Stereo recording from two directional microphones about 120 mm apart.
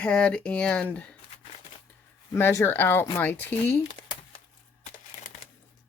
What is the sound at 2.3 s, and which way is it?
Speech, 25° left (ahead or behind).